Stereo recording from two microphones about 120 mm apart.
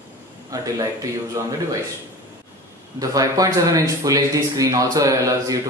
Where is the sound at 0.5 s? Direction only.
30° right (ahead or behind).